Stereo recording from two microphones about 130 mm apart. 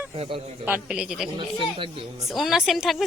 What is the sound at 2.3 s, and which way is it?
Speech, centre (ahead or behind).